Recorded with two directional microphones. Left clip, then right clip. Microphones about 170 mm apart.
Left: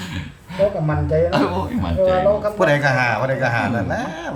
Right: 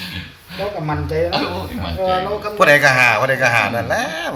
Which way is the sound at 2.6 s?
20° right (ahead or behind).